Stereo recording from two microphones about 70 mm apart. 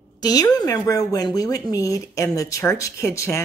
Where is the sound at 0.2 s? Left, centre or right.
Left.